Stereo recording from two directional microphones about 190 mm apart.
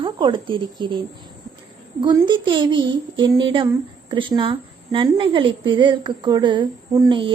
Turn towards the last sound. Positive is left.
turn(degrees=-25)  # may be behind; listen again after turning